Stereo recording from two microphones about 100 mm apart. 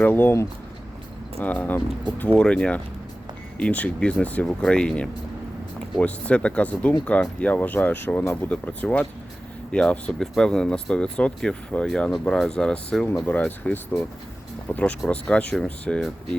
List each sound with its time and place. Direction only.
0.0 s speech: 20° left (ahead or behind)